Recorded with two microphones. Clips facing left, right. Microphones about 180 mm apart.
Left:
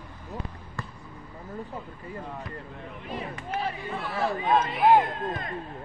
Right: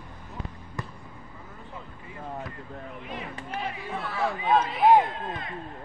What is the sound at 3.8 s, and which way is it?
Speech, centre (ahead or behind).